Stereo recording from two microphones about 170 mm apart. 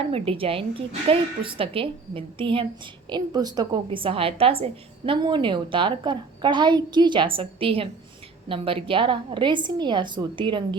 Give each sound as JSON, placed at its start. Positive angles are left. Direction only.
{"t": 0.0, "sound": "a woman's voice", "side_deg": -35}